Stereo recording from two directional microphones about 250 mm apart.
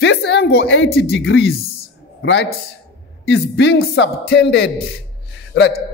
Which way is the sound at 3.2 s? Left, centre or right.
Left.